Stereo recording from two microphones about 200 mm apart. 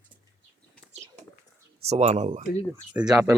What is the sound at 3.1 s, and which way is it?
Speech, 5° right (ahead or behind).